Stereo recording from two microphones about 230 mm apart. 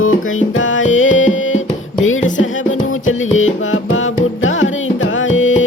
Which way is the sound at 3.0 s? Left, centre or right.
Left.